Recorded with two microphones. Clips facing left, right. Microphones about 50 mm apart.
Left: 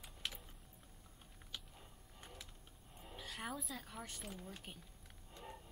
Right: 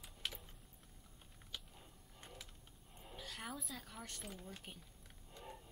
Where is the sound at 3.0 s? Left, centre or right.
Centre.